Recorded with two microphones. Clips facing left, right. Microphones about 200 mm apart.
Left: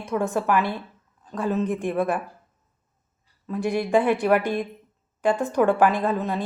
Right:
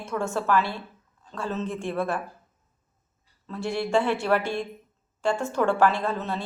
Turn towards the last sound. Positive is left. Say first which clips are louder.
# left 4 dB
turn(degrees=15)  # may be behind; listen again after turning